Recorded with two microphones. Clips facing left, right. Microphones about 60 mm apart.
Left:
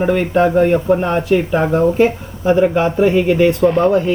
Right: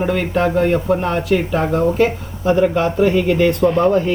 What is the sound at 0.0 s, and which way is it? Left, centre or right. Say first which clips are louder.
Speech: left 3 dB; centre.